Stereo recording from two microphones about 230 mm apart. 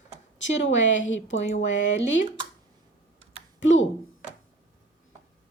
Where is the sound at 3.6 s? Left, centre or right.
Left.